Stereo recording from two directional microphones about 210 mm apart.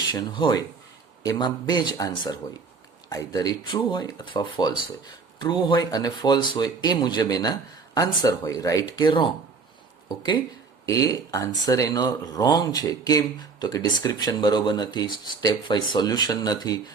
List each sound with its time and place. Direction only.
0.1 s speech: 20° left (ahead or behind)
10.8 s speech: 15° left (ahead or behind)